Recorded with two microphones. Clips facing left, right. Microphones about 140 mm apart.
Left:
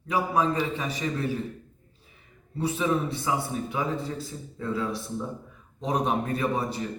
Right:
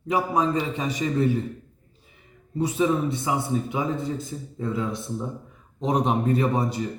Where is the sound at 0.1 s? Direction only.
20° right (ahead or behind).